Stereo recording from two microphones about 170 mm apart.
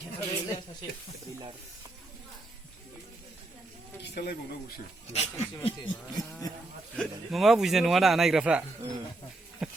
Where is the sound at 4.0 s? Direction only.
65° left (ahead or behind).